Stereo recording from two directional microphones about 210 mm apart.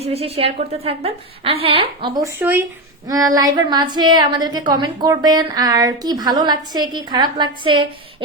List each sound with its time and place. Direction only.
0.0 s a woman's voice: 30° right (ahead or behind)
2.2 s a woman's voice: 10° right (ahead or behind)